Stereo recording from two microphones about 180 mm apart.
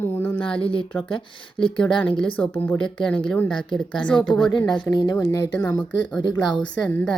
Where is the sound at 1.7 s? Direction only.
5° left (ahead or behind).